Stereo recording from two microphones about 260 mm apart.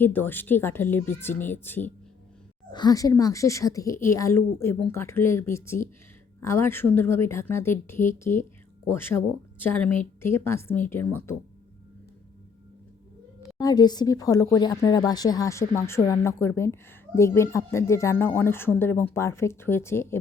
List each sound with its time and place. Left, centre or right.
0.0 s speech: centre
13.6 s speech: centre